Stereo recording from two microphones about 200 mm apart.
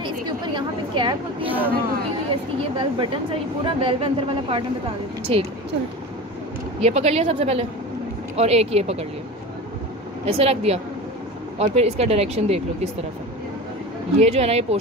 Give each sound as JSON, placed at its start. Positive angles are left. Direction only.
{"t": 0.6, "sound": "a woman's voice", "side_deg": -25}
{"t": 1.4, "sound": "speech", "side_deg": -10}
{"t": 2.8, "sound": "a woman's voice", "side_deg": -25}
{"t": 6.8, "sound": "speech", "side_deg": -35}
{"t": 10.2, "sound": "speech", "side_deg": -30}
{"t": 14.2, "sound": "speech", "side_deg": -30}